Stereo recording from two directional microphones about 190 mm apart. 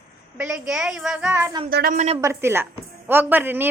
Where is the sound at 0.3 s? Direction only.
5° right (ahead or behind).